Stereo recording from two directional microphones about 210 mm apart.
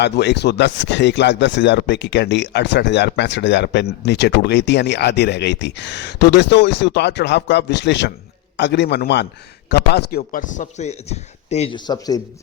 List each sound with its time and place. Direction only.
0.0 s a man's voice: 55° left (ahead or behind); by 12.2 s 20° left (ahead or behind)